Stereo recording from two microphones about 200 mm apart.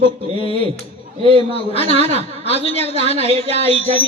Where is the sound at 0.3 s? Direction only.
25° left (ahead or behind).